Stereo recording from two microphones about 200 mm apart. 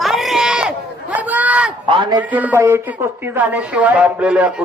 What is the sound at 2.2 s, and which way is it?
A woman's voice, 5° right (ahead or behind).